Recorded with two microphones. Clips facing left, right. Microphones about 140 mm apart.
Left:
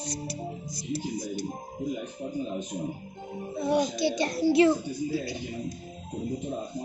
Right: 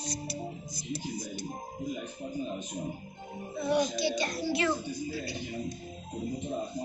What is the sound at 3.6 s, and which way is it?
A child's voice, 35° left (ahead or behind).